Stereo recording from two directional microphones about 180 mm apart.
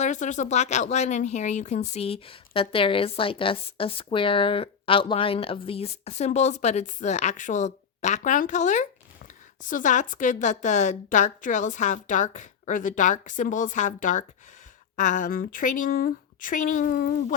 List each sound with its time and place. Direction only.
0.0 s speech: 45° left (ahead or behind)